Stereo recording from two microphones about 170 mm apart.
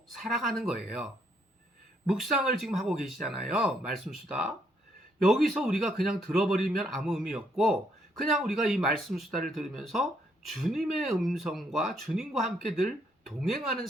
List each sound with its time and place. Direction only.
0.2 s speech: centre (ahead or behind)
2.0 s speech: centre (ahead or behind)